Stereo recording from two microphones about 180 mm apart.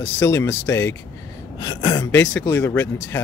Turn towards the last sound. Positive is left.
turn(degrees=10)  # may be behind; listen again after turning